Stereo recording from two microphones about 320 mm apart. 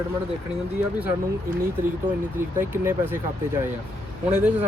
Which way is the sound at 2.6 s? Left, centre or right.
Centre.